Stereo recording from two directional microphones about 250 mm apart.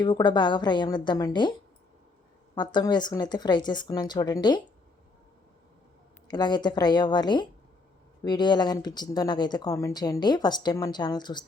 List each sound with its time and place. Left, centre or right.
0.0 s speech: centre
2.6 s speech: centre
6.2 s speech: centre